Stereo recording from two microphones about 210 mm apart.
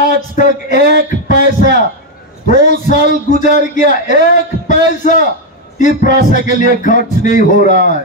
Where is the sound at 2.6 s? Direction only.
35° left (ahead or behind).